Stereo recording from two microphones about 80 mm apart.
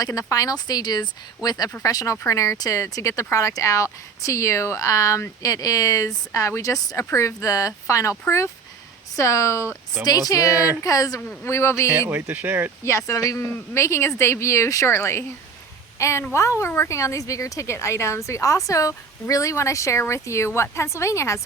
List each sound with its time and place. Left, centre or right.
0.0 s a woman's voice: left
9.1 s a woman's voice: left
10.0 s speech: left
10.5 s speech: centre
10.8 s speech: left
11.4 s a woman's voice: left
12.3 s speech: right
12.8 s a woman's voice: left